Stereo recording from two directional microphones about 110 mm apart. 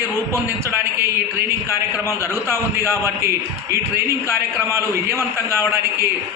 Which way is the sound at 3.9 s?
25° right (ahead or behind).